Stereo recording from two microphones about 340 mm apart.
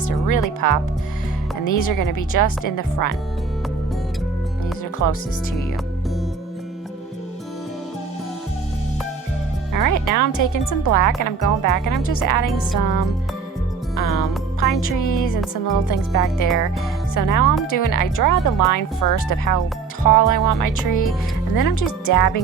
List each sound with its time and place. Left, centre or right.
0.6 s speech: left
5.0 s speech: left
9.7 s speech: left
14.2 s speech: left